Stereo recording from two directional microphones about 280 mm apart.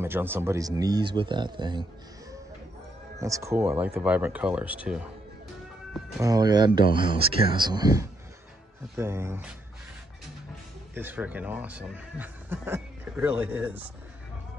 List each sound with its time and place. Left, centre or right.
0.0 s a man's voice: centre
3.2 s speech: centre
6.1 s a man's voice: centre
11.0 s speech: centre